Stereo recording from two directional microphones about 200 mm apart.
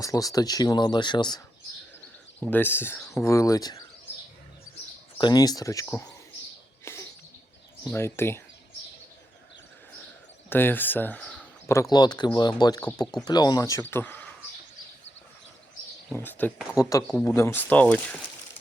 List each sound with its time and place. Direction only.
0.0 s speech: 15° left (ahead or behind)
2.4 s speech: 10° left (ahead or behind)
5.1 s speech: 20° left (ahead or behind)
6.8 s bird: 15° left (ahead or behind)
7.9 s speech: 10° left (ahead or behind)
10.5 s speech: 10° left (ahead or behind)
16.1 s speech: 10° left (ahead or behind)